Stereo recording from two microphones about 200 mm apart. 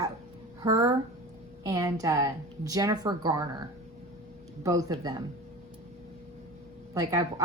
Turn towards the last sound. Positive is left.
turn(degrees=-15)  # may be behind; listen again after turning